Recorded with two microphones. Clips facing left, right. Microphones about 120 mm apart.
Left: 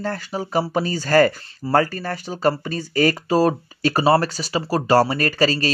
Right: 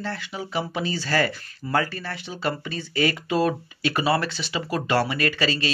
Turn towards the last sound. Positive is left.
turn(degrees=40)  # may be behind; listen again after turning